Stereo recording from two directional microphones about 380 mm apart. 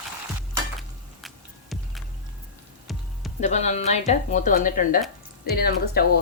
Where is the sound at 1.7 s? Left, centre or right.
Centre.